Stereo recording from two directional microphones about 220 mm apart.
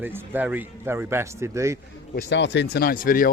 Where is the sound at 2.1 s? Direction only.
50° left (ahead or behind).